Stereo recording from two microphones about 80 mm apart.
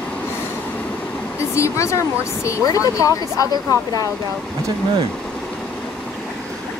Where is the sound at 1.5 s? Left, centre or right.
Left.